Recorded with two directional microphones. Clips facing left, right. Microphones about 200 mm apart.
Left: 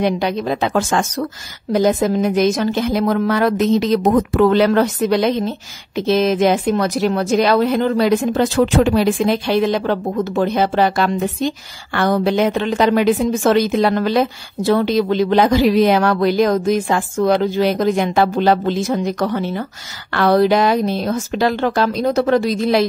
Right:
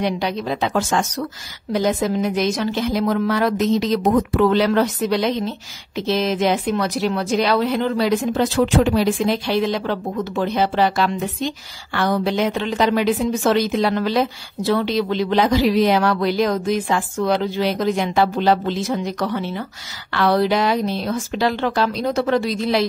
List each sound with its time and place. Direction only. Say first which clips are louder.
0.0 s a woman's voice: left 4 dB; 50° left (ahead or behind)